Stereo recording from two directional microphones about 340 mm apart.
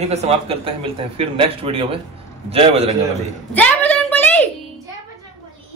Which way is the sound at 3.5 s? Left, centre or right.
Centre.